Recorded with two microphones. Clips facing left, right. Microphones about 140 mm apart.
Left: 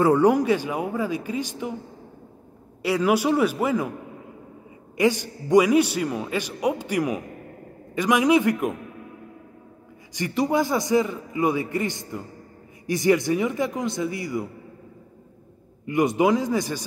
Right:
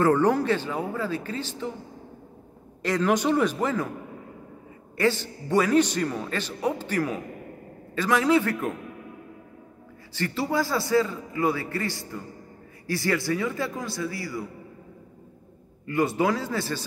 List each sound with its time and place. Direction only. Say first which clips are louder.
0.0 s a man's voice: left 3 dB; 10° left (ahead or behind)
2.8 s a man's voice: left 2 dB; 10° left (ahead or behind)
4.9 s a man's voice: left 3 dB; 15° left (ahead or behind)
10.1 s a man's voice: left 4 dB; 15° left (ahead or behind)
15.8 s a man's voice: left 4 dB; 15° left (ahead or behind)